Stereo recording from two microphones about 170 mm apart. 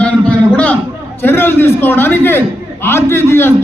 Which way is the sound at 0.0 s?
5° left (ahead or behind).